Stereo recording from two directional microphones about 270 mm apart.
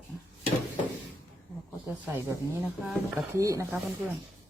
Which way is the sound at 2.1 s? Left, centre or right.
Centre.